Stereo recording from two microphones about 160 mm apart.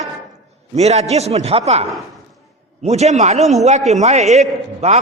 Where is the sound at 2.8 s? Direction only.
45° right (ahead or behind).